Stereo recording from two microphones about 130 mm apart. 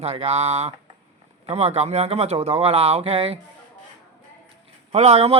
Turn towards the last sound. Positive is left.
turn(degrees=-55)  # may be behind; listen again after turning